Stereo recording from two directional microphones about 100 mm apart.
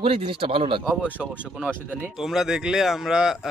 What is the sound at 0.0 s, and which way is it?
Speech, 65° right (ahead or behind).